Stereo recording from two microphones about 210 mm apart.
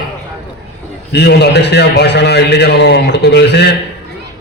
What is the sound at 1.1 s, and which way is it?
A man's voice, 50° left (ahead or behind).